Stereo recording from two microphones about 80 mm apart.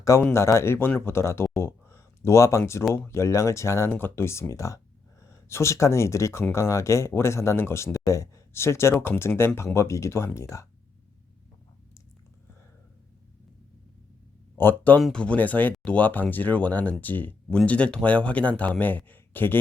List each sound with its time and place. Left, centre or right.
0.3 s speech: left
14.6 s speech: left